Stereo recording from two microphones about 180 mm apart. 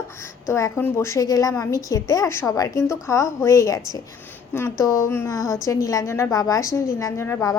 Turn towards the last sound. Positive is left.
turn(degrees=15)  # may be behind; listen again after turning